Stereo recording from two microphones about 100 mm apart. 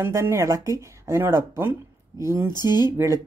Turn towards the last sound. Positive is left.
turn(degrees=-35)  # may be behind; listen again after turning